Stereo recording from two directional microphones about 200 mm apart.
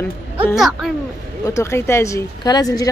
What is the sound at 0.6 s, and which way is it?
Speech, centre (ahead or behind).